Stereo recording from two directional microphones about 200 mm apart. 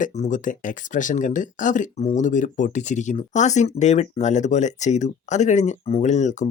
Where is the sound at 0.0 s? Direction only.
35° left (ahead or behind).